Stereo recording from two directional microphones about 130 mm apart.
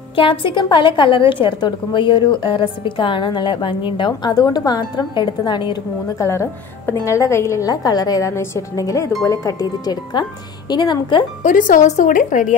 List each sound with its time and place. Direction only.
0.1 s a woman's voice: 40° left (ahead or behind)
6.1 s a woman's voice: 20° left (ahead or behind); by 11.2 s 35° left (ahead or behind)
11.4 s a woman's voice: 90° left; by 12.5 s 70° left (ahead or behind)